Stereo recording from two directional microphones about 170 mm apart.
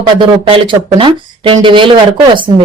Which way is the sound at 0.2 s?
30° right (ahead or behind).